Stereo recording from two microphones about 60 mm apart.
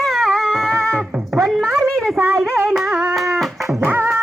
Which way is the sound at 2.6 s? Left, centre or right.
Centre.